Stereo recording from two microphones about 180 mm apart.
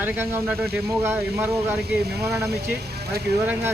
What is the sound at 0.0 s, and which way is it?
Speech, 10° right (ahead or behind).